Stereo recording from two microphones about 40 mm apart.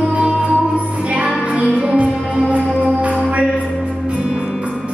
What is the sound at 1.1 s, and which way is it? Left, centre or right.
Music, right.